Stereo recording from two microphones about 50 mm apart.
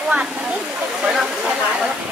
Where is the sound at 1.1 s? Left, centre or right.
Centre.